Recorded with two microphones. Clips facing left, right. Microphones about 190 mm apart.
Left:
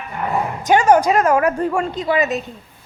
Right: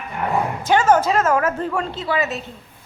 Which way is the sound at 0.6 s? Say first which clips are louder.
Left 3 dB; 15° left (ahead or behind).